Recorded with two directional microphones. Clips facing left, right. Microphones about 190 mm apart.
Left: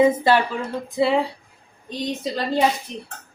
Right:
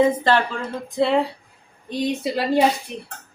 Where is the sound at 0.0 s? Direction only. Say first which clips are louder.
Left 1 dB; 10° left (ahead or behind); by 2.5 s 10° right (ahead or behind).